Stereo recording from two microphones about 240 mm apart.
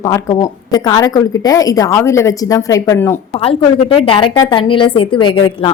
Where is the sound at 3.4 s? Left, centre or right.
Left.